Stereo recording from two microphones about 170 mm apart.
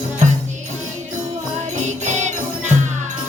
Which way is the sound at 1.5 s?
45° right (ahead or behind).